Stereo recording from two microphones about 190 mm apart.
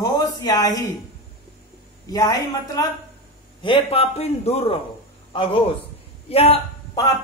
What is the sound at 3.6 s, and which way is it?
A man's voice, 30° left (ahead or behind).